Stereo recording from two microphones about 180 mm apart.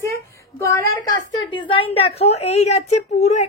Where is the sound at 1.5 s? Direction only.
30° left (ahead or behind).